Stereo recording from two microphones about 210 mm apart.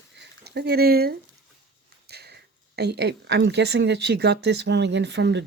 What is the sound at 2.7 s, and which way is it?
Speech, 50° right (ahead or behind).